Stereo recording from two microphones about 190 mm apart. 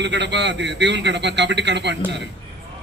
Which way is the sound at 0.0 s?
65° right (ahead or behind).